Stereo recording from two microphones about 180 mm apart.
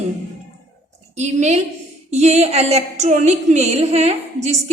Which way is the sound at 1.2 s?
40° right (ahead or behind).